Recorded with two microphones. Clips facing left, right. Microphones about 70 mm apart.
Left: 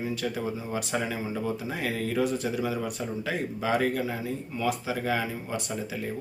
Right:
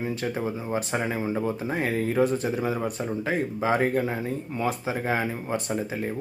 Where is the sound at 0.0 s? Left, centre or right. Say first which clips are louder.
Right 2 dB; right.